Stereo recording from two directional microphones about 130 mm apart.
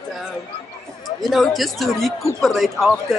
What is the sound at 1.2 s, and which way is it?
Speech, centre (ahead or behind).